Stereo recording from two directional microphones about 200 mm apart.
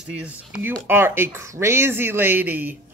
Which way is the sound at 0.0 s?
10° right (ahead or behind).